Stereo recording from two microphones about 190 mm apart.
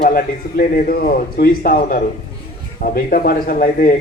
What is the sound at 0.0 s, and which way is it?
A man's voice, 50° left (ahead or behind).